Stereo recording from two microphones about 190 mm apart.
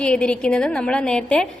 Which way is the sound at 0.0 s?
5° left (ahead or behind).